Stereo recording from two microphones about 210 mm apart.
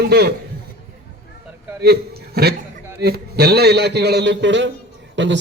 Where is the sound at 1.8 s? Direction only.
50° right (ahead or behind).